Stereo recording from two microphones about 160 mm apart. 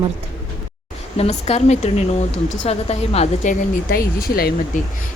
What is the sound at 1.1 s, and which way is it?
A woman's voice, 40° left (ahead or behind).